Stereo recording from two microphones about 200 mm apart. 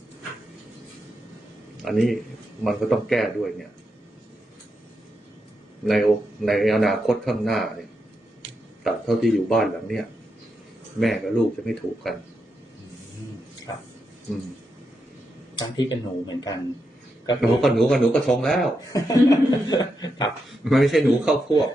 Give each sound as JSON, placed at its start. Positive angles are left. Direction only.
{"t": 1.8, "sound": "speech", "side_deg": 0}
{"t": 5.8, "sound": "speech", "side_deg": 0}
{"t": 8.8, "sound": "speech", "side_deg": 0}
{"t": 11.0, "sound": "speech", "side_deg": 0}
{"t": 15.5, "sound": "speech", "side_deg": 20}
{"t": 17.4, "sound": "speech", "side_deg": 0}
{"t": 18.9, "sound": "speech", "side_deg": 15}
{"t": 20.5, "sound": "speech", "side_deg": 0}